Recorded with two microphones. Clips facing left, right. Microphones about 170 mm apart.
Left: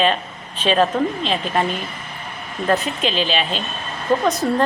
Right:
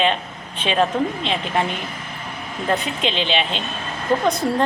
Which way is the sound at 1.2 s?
20° right (ahead or behind).